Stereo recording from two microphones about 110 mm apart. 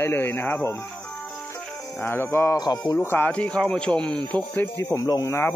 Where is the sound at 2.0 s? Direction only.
20° left (ahead or behind).